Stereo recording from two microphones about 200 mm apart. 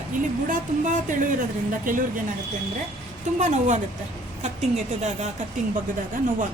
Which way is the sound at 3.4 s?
35° right (ahead or behind).